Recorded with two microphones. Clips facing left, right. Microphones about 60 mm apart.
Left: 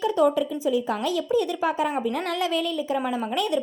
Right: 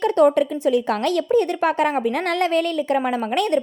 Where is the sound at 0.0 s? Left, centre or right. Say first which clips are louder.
Right 5 dB; right.